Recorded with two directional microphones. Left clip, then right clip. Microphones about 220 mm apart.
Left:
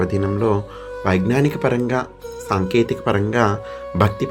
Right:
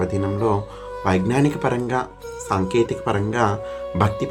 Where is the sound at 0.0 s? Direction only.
15° left (ahead or behind).